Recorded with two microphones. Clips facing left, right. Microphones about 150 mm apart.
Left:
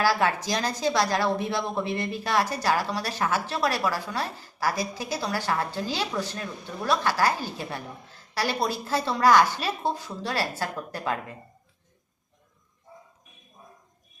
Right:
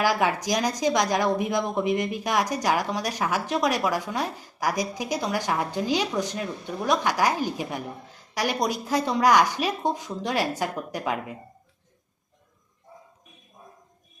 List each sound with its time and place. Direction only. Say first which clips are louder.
0.0 s a woman's voice: right 1 dB; 15° right (ahead or behind)